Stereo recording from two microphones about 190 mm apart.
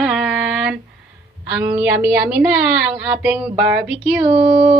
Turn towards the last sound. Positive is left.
turn(degrees=-30)  # may be behind; listen again after turning